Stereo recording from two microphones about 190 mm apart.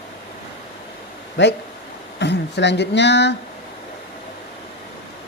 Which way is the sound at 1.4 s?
65° left (ahead or behind).